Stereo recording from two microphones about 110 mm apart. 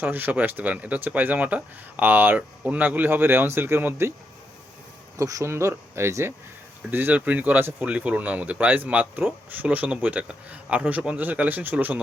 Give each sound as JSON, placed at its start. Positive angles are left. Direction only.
{"t": 0.0, "sound": "speech", "side_deg": -15}
{"t": 5.1, "sound": "speech", "side_deg": -30}